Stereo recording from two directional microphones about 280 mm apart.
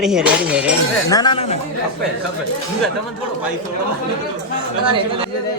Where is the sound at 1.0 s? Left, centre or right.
Centre.